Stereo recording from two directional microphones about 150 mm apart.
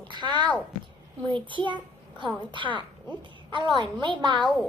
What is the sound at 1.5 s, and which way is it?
A child's voice, 35° right (ahead or behind).